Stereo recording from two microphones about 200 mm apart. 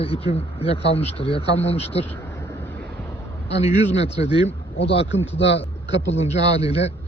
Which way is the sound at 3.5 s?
30° left (ahead or behind).